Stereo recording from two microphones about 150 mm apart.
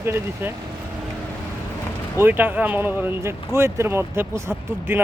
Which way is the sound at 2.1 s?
15° right (ahead or behind).